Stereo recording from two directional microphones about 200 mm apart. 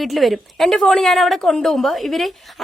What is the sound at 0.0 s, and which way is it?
A woman's voice, centre (ahead or behind).